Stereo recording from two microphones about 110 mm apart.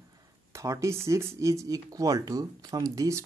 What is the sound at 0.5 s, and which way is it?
Speech, 25° right (ahead or behind).